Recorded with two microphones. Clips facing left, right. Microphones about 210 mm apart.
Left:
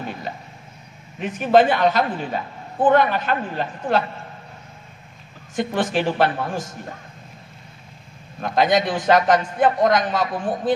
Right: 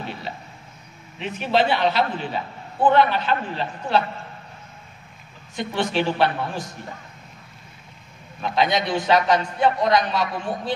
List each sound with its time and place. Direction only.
1.2 s a man's voice: 45° left (ahead or behind)
5.6 s a man's voice: 50° left (ahead or behind)
8.4 s a man's voice: 50° left (ahead or behind)